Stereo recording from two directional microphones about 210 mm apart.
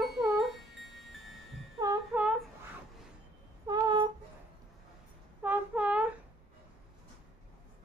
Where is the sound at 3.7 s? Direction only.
20° right (ahead or behind).